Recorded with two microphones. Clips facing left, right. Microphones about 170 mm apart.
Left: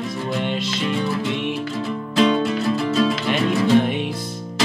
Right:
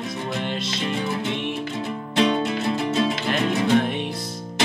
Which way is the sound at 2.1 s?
25° right (ahead or behind).